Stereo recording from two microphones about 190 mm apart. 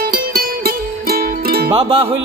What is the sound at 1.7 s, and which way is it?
Music, 30° right (ahead or behind).